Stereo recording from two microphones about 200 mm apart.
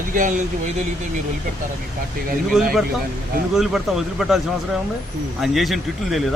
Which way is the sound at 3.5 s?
Centre (ahead or behind).